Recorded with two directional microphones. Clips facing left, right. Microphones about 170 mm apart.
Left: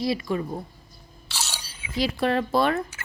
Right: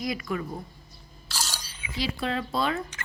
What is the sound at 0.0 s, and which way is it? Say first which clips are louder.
Speech: left 5 dB; 30° left (ahead or behind).